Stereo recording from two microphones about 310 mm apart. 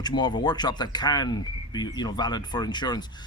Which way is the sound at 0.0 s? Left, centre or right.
Centre.